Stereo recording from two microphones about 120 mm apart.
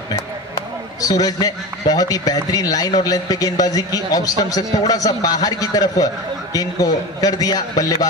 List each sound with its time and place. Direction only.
1.0 s a man's voice: 30° left (ahead or behind)